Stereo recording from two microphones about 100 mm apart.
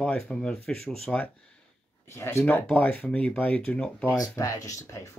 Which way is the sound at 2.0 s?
25° left (ahead or behind).